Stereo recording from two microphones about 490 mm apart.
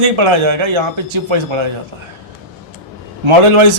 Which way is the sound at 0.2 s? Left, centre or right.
Right.